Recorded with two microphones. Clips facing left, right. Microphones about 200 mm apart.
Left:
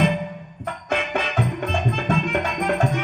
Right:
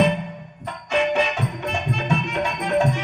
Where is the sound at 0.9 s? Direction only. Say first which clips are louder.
Right 5 dB; 55° left (ahead or behind).